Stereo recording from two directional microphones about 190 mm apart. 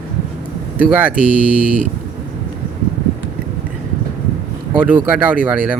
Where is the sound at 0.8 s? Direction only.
5° right (ahead or behind).